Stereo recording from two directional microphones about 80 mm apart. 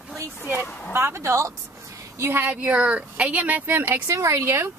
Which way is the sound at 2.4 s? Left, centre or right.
Centre.